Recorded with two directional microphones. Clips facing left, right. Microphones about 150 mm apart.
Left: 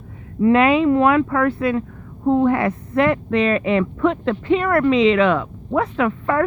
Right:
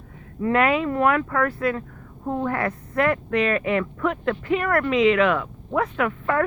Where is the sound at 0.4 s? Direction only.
20° left (ahead or behind).